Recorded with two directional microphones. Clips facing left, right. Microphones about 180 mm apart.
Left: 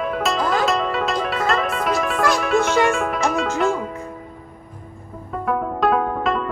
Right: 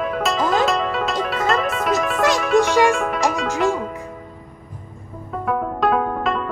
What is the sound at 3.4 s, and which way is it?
Music, 15° right (ahead or behind).